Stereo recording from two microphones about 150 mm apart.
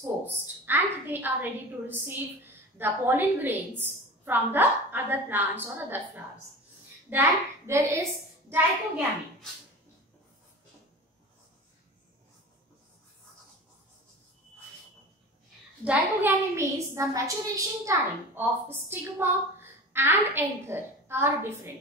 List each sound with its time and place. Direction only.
0.7 s a woman's voice: 15° right (ahead or behind)
15.8 s a woman's voice: 10° right (ahead or behind)